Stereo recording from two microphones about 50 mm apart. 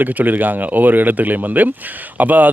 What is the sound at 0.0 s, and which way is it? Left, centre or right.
Speech, right.